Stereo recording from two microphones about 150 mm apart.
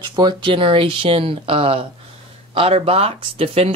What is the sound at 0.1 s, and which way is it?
Speech, 30° right (ahead or behind).